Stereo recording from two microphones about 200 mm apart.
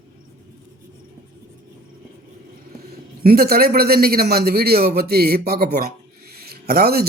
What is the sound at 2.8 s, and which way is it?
A man's voice, 50° right (ahead or behind).